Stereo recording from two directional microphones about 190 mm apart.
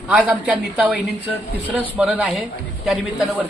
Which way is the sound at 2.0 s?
5° right (ahead or behind).